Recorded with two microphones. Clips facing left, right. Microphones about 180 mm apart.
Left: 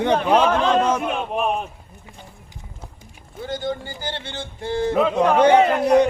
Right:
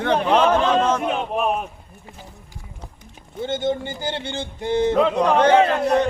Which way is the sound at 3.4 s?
25° right (ahead or behind).